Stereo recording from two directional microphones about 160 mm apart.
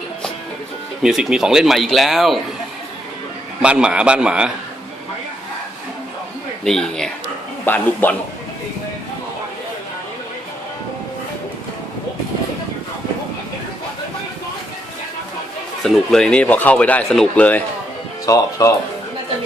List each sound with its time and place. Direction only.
1.0 s speech: 5° right (ahead or behind)
3.6 s speech: 5° right (ahead or behind)
6.7 s speech: 5° left (ahead or behind)
15.8 s speech: 5° left (ahead or behind)
18.3 s speech: 20° left (ahead or behind)